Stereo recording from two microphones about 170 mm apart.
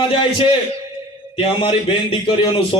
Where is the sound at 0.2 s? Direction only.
30° left (ahead or behind).